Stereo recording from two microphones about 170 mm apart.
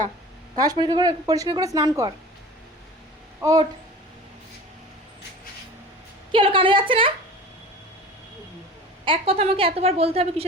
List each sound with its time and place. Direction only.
0.5 s a woman's voice: 20° right (ahead or behind)
3.4 s a woman's voice: 25° right (ahead or behind)
6.3 s a woman's voice: 30° right (ahead or behind)
9.0 s a woman's voice: 35° right (ahead or behind)